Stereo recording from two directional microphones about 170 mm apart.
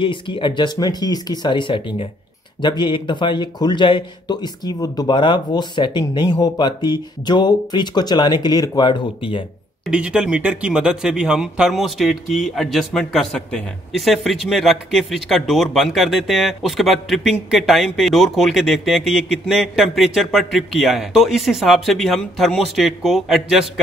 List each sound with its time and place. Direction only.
0.0 s speech: 30° left (ahead or behind)
9.8 s speech: 5° right (ahead or behind)